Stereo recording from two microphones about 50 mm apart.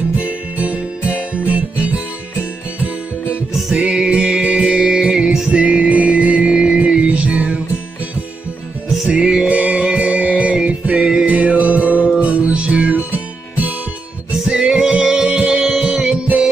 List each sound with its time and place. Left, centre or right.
0.2 s music: right
3.7 s music: centre
7.1 s music: right
8.8 s music: centre
9.1 s music: centre
9.5 s music: right
11.2 s music: right
14.5 s music: centre
15.6 s music: centre